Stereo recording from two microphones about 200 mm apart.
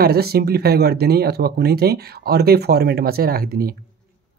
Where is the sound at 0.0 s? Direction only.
50° right (ahead or behind).